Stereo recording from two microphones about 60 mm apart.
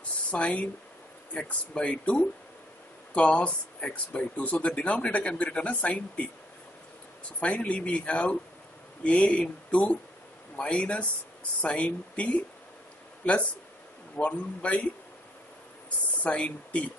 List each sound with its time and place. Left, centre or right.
0.3 s speech: left
7.3 s speech: left
14.1 s speech: centre
16.2 s speech: left